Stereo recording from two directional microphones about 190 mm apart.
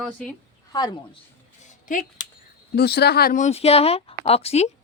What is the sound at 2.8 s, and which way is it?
Speech, 60° left (ahead or behind).